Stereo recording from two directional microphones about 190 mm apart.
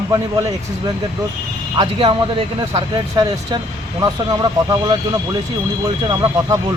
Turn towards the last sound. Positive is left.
turn(degrees=-20)  # may be behind; listen again after turning